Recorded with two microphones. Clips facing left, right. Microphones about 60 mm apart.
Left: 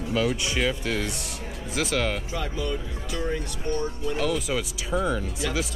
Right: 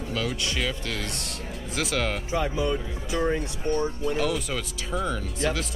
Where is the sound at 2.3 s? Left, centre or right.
Right.